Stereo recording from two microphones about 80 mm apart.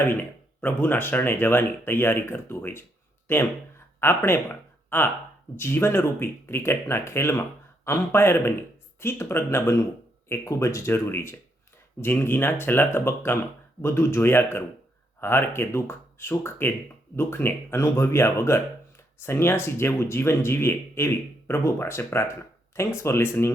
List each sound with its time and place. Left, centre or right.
0.0 s speech: left